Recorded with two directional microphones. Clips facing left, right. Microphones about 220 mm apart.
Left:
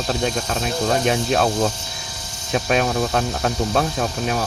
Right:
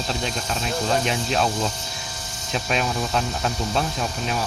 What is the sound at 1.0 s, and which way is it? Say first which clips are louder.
Speech: left 5 dB; 50° left (ahead or behind).